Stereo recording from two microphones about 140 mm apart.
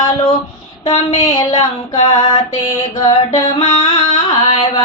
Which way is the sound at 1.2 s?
30° left (ahead or behind).